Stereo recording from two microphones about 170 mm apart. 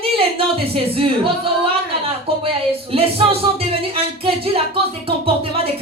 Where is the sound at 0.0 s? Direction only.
35° right (ahead or behind).